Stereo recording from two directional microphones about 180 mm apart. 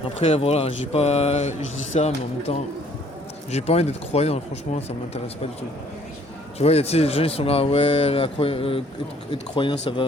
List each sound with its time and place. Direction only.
0.0 s speech: 35° left (ahead or behind)
6.6 s speech: 35° left (ahead or behind)